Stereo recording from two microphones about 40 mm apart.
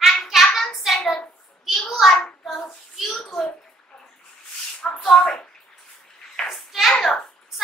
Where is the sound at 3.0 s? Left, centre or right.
Centre.